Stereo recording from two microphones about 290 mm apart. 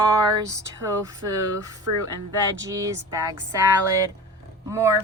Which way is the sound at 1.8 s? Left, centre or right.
Right.